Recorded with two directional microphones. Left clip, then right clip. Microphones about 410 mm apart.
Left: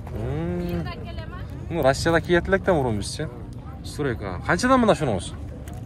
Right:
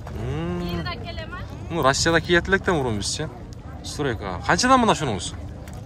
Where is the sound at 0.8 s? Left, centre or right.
Centre.